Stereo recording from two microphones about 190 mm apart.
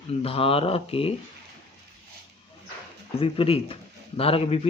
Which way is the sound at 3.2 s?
30° left (ahead or behind).